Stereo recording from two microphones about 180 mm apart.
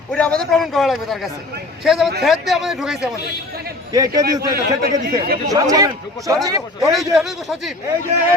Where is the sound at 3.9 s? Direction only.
20° right (ahead or behind).